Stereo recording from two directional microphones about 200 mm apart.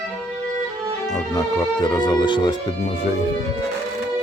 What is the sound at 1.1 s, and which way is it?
Speech, 15° left (ahead or behind).